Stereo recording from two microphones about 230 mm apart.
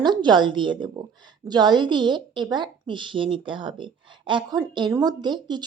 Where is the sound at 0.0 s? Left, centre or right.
Centre.